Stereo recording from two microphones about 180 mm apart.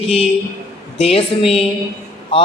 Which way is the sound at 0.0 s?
35° left (ahead or behind).